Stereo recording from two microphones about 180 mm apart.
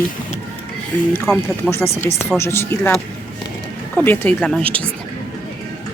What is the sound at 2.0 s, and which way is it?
Speech, 15° left (ahead or behind).